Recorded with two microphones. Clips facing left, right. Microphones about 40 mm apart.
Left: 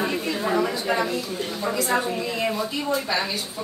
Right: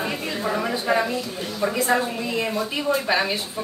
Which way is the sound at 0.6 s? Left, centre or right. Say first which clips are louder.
Right 3 dB; right.